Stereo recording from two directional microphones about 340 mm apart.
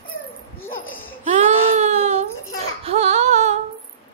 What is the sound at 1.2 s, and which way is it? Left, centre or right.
Baby cry, right.